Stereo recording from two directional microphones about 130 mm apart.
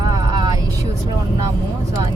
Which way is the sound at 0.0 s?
30° right (ahead or behind).